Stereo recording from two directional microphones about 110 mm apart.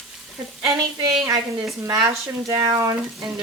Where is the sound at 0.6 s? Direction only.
30° right (ahead or behind).